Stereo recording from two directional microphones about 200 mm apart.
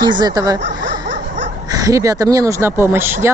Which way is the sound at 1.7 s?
15° right (ahead or behind).